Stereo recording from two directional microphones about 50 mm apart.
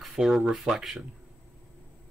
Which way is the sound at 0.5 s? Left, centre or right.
Centre.